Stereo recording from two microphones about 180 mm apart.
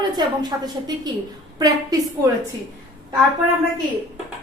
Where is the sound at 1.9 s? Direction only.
20° right (ahead or behind).